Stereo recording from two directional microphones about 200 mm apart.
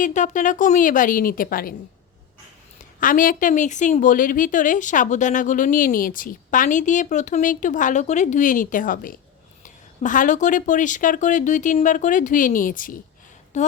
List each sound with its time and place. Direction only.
0.0 s a woman's voice: 40° left (ahead or behind)
3.0 s a woman's voice: 45° left (ahead or behind)